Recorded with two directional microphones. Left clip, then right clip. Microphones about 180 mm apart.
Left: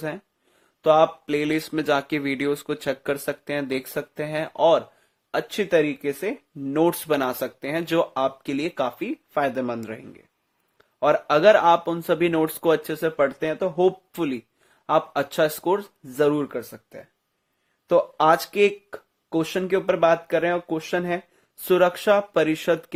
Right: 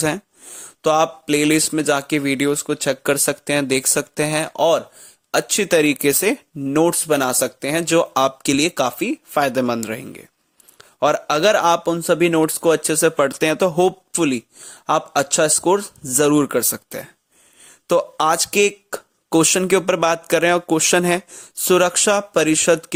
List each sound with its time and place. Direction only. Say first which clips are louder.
0.8 s speech: right 1 dB; 35° right (ahead or behind)
5.5 s speech: right 4 dB; 45° right (ahead or behind)
6.7 s speech: right 4 dB; 30° right (ahead or behind)
12.9 s speech: right 6 dB; 45° right (ahead or behind)
14.1 s speech: right 8 dB; 35° right (ahead or behind)